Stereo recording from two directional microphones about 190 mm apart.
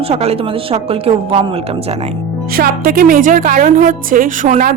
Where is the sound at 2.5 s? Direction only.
50° right (ahead or behind).